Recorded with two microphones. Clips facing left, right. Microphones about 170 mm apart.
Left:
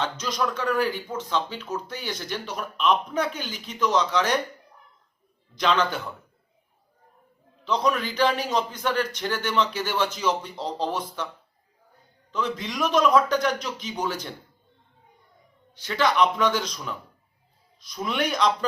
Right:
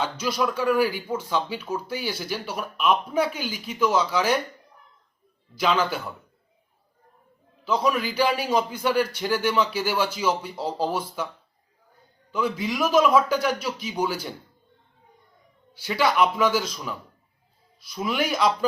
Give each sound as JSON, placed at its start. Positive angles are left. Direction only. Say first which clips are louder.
{"t": 0.0, "sound": "speech", "louder": "right 2 dB", "side_deg": -10}
{"t": 5.5, "sound": "speech", "louder": "even", "side_deg": -5}
{"t": 7.6, "sound": "speech", "louder": "right 1 dB", "side_deg": -5}
{"t": 12.3, "sound": "speech", "louder": "right 3 dB", "side_deg": -10}
{"t": 15.7, "sound": "speech", "louder": "right 1 dB", "side_deg": -10}